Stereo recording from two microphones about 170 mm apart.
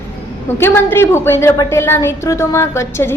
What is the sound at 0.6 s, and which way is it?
A woman's voice, 15° left (ahead or behind).